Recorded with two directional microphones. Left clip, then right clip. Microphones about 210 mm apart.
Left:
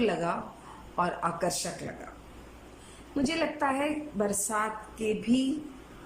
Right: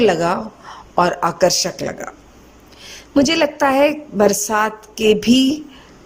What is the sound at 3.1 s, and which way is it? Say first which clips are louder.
A woman's voice: right 15 dB; 45° right (ahead or behind).